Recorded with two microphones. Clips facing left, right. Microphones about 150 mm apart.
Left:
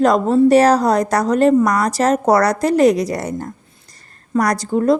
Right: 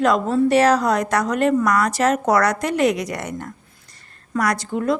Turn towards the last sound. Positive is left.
turn(degrees=40)  # may be behind; listen again after turning